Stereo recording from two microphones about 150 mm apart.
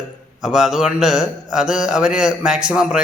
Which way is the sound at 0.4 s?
5° right (ahead or behind).